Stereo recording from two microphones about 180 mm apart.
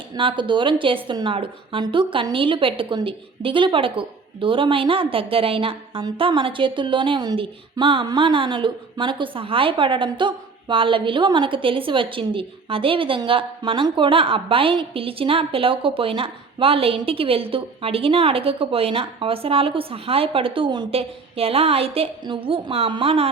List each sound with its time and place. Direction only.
0.2 s a woman's voice: 30° right (ahead or behind)